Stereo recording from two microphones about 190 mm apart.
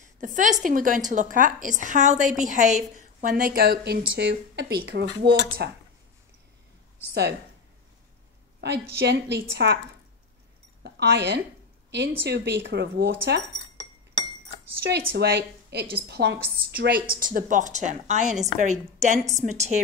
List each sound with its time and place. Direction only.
0.2 s a woman's voice: 45° right (ahead or behind)
4.1 s a woman's voice: 65° right (ahead or behind)
8.5 s a woman's voice: 60° right (ahead or behind)
10.8 s a woman's voice: 60° right (ahead or behind)
15.1 s a woman's voice: 60° right (ahead or behind); by 19.8 s 35° right (ahead or behind)